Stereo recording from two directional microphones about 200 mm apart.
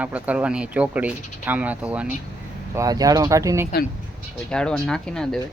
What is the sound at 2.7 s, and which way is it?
Speech, 20° right (ahead or behind).